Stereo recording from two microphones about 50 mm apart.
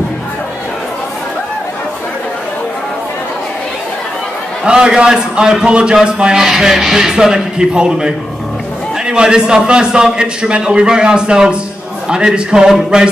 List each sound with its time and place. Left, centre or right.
4.6 s a man's voice: centre